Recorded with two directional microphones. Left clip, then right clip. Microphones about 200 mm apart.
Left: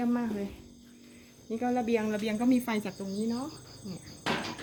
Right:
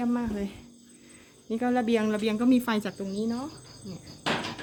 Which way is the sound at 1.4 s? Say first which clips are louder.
Right 3 dB; 20° right (ahead or behind).